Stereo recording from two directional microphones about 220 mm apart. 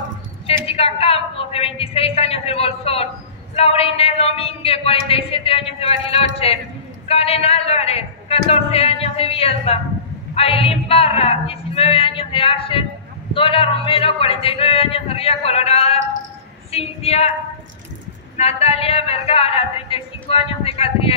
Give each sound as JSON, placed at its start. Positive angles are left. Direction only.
{"t": 0.5, "sound": "a woman's voice", "side_deg": 25}
{"t": 18.4, "sound": "speech", "side_deg": 25}